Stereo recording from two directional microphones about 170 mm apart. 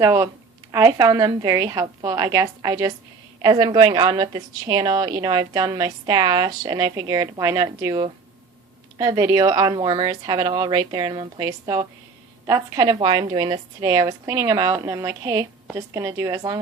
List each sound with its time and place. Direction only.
0.0 s a woman's voice: 15° right (ahead or behind)